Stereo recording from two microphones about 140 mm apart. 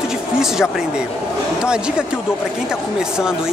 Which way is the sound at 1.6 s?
5° right (ahead or behind).